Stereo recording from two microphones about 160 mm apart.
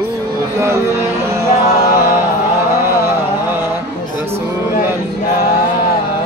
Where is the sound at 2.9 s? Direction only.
15° right (ahead or behind).